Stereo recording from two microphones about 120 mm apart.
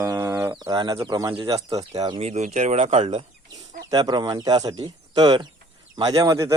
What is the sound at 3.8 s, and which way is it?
A man's voice, 35° right (ahead or behind).